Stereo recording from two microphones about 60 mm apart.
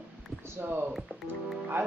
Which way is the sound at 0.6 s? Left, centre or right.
Right.